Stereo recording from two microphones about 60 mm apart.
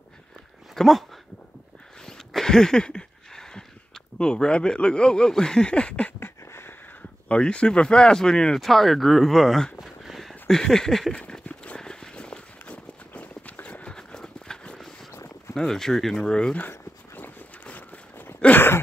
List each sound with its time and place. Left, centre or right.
0.7 s speech: centre
2.0 s a sound: centre
6.1 s a sound: left
7.0 s speech: centre
8.5 s speech: centre
9.8 s a sound: centre
10.5 s speech: centre
11.4 s run: left
13.9 s horse: centre
15.5 s speech: centre
16.5 s dog: left
17.6 s a sound: left